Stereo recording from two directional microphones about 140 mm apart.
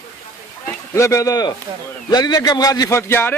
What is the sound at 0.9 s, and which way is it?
Speech, 20° left (ahead or behind).